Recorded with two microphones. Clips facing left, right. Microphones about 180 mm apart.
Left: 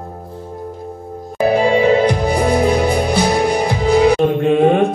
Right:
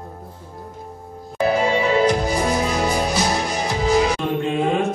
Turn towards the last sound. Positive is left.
turn(degrees=60)  # may be behind; listen again after turning